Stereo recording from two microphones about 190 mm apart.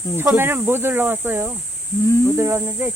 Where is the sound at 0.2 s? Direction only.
10° right (ahead or behind).